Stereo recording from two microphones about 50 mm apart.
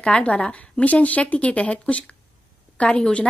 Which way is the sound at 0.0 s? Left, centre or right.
Left.